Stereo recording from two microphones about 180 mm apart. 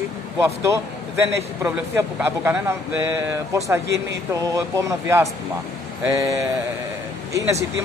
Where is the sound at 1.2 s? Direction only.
15° right (ahead or behind).